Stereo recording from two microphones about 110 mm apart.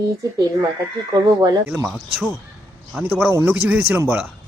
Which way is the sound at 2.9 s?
15° right (ahead or behind).